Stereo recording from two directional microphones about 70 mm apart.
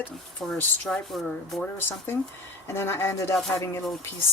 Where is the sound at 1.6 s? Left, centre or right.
Left.